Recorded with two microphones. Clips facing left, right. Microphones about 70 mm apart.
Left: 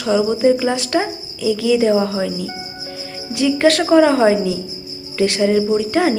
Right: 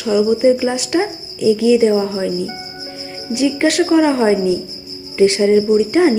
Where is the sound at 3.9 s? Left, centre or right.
Centre.